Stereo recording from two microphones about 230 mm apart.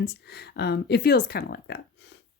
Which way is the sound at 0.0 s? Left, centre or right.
Left.